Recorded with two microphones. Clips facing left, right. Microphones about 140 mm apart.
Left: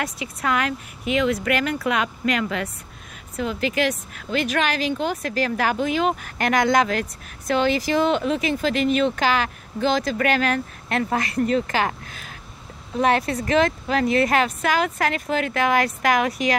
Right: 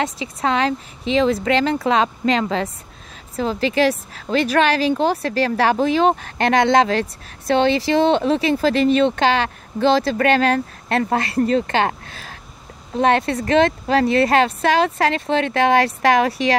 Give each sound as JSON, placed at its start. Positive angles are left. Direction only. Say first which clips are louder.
{"t": 0.0, "sound": "a woman's voice", "louder": "right 5 dB", "side_deg": -25}